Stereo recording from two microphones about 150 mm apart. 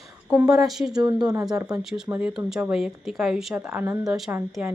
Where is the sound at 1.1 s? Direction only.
30° right (ahead or behind).